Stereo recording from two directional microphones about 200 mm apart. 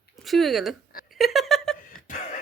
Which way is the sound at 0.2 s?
Centre (ahead or behind).